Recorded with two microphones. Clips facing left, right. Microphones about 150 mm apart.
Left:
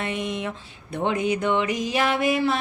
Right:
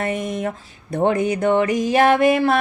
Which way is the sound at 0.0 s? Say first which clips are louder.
Right 5 dB; 45° right (ahead or behind).